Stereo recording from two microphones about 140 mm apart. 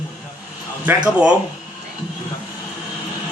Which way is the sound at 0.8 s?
10° right (ahead or behind).